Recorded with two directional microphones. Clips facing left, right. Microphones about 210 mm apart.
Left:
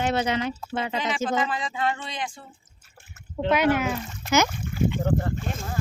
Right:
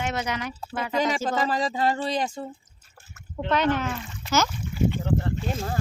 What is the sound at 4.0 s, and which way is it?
Speech, 40° left (ahead or behind).